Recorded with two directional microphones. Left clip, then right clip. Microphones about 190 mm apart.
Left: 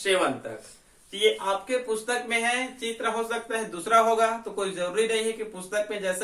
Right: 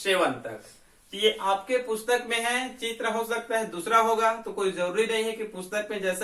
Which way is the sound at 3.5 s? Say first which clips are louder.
Left 1 dB; 20° left (ahead or behind).